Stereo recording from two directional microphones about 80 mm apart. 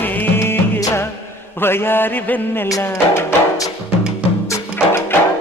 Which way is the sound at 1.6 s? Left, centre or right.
Left.